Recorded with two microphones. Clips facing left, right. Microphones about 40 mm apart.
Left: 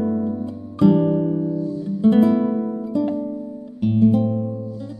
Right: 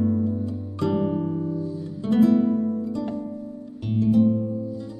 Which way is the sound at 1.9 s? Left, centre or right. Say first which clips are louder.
Left 3 dB; centre.